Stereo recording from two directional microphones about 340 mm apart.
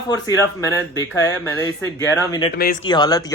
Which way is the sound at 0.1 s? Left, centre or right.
Centre.